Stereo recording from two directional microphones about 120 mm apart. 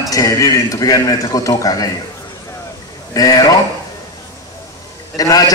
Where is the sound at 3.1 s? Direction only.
30° left (ahead or behind).